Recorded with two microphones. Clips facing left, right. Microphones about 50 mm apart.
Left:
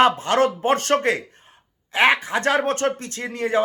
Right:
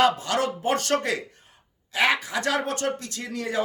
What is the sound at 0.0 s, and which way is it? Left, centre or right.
Speech, left.